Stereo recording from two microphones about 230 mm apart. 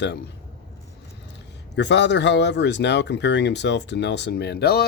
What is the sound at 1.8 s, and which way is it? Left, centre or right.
Speech, left.